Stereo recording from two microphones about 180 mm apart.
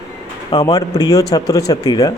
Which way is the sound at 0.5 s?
20° left (ahead or behind).